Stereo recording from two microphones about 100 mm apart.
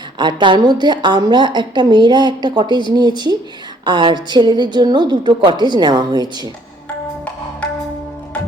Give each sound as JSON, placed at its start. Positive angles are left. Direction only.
{"t": 0.2, "sound": "a woman's voice", "side_deg": -50}